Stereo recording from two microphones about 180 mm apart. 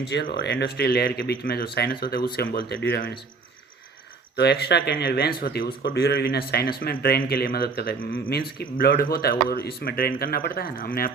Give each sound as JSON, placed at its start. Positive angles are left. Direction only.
{"t": 0.0, "sound": "speech", "side_deg": 65}
{"t": 4.4, "sound": "speech", "side_deg": 65}